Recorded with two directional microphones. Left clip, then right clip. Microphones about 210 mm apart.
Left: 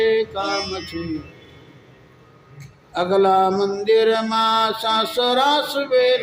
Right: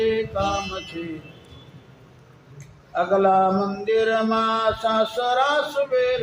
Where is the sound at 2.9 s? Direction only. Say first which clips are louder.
Left 2 dB; 60° left (ahead or behind).